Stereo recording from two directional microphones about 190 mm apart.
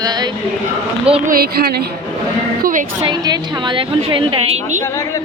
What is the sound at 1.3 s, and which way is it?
Speech, 50° right (ahead or behind).